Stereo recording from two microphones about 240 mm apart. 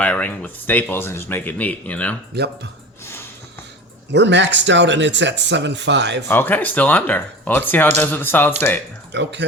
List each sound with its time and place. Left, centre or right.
0.0 s speech: centre
2.3 s speech: right
4.1 s speech: right
6.2 s speech: centre
9.1 s speech: right